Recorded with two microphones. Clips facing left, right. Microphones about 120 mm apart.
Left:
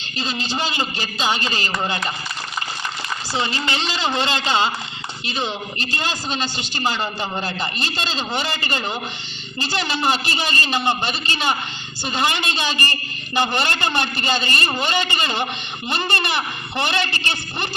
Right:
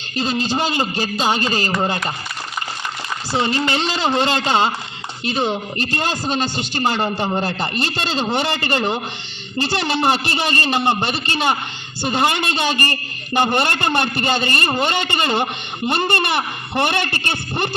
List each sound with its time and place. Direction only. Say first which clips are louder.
0.2 s a man's voice: right 5 dB; 50° right (ahead or behind)
3.3 s a man's voice: right 5 dB; 45° right (ahead or behind)